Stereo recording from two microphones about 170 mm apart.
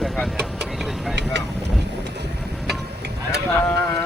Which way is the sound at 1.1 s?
90° right.